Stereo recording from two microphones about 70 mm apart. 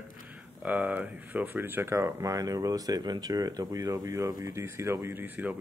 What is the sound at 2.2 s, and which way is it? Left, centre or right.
Speech, right.